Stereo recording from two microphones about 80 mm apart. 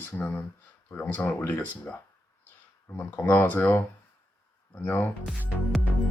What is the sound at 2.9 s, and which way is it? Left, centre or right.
Speech, left.